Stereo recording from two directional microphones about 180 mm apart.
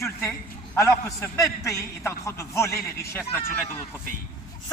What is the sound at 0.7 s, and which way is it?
A man's voice, 15° left (ahead or behind).